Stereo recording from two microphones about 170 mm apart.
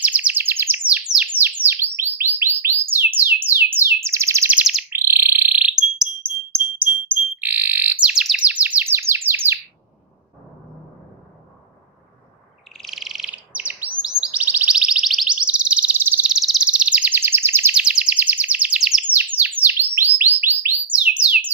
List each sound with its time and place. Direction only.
0.0 s chirp: 10° right (ahead or behind)
1.1 s bird: 10° right (ahead or behind)
12.7 s bird: centre (ahead or behind)